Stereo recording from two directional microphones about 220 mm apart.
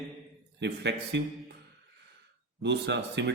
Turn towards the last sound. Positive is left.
turn(degrees=-50)  # may be behind; listen again after turning